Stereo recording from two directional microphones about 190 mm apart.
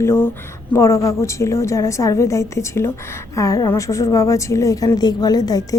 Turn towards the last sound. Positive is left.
turn(degrees=20)  # may be behind; listen again after turning